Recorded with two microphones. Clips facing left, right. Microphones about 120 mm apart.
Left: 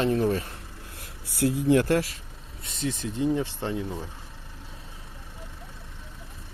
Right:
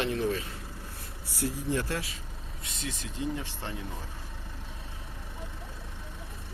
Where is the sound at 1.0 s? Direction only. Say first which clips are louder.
Left 8 dB; 90° left; by 2.0 s 65° left (ahead or behind).